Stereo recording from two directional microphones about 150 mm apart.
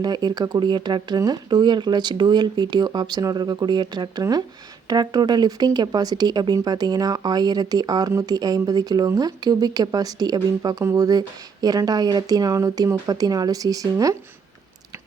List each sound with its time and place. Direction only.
0.0 s speech: 30° right (ahead or behind)